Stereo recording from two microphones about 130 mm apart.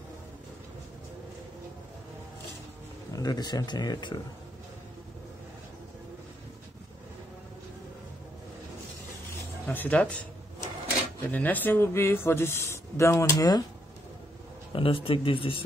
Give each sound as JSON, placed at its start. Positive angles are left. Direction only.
{"t": 3.1, "sound": "speech", "side_deg": 30}
{"t": 9.7, "sound": "speech", "side_deg": 10}
{"t": 11.3, "sound": "speech", "side_deg": 15}
{"t": 14.7, "sound": "speech", "side_deg": 45}